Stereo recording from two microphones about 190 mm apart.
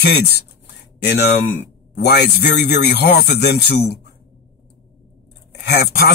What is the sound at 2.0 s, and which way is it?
Speech, 60° left (ahead or behind).